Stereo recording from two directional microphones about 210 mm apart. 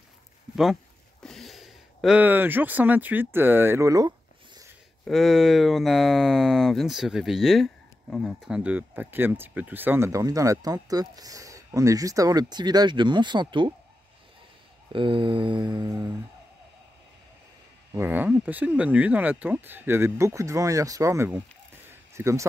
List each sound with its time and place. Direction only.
1.2 s speech: centre (ahead or behind); by 4.1 s 15° right (ahead or behind)
5.0 s speech: centre (ahead or behind); by 13.7 s 20° right (ahead or behind)
14.9 s mantra: 25° right (ahead or behind)
17.9 s speech: 10° right (ahead or behind)
21.8 s a sound: 15° right (ahead or behind)